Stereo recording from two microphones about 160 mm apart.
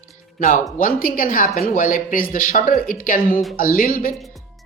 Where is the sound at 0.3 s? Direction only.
55° left (ahead or behind).